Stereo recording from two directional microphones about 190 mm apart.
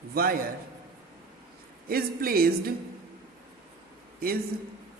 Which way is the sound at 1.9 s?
50° right (ahead or behind).